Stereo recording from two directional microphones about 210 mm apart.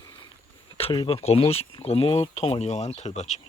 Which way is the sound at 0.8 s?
25° left (ahead or behind).